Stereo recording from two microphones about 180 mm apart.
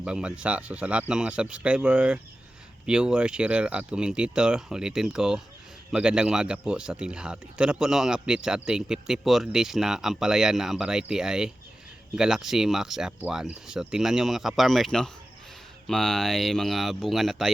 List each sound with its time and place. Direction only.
0.0 s speech: 5° right (ahead or behind)